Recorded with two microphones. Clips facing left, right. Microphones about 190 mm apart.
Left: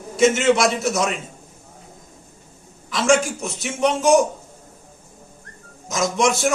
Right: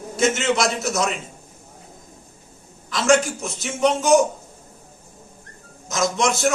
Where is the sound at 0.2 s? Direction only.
Centre (ahead or behind).